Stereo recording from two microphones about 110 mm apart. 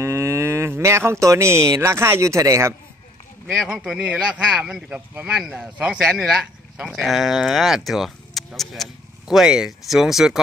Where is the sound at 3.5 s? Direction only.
5° right (ahead or behind).